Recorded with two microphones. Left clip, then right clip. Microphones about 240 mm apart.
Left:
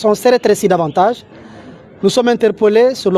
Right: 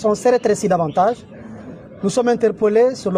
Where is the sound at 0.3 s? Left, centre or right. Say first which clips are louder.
Left 4 dB; left.